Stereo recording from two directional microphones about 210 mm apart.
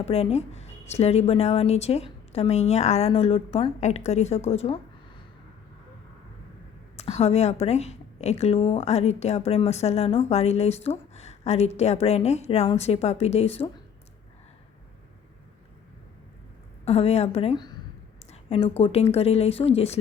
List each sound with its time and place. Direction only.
0.0 s a woman's voice: 30° left (ahead or behind)
6.9 s a woman's voice: 30° left (ahead or behind)
16.8 s speech: 30° left (ahead or behind)
18.2 s a sound: 30° left (ahead or behind)
18.8 s speech: 30° left (ahead or behind)